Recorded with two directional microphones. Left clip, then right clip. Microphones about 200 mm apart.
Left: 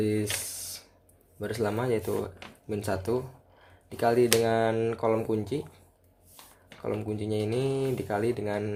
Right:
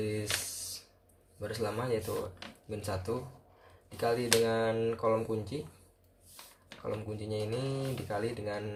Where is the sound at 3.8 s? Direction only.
50° left (ahead or behind).